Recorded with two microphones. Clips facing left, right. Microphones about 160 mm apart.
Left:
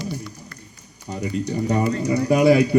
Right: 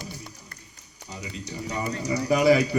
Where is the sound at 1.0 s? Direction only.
50° left (ahead or behind).